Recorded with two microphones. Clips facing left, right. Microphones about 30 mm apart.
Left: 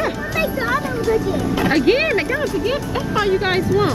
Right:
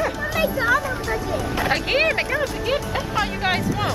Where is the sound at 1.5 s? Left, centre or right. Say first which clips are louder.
Left 5 dB; centre.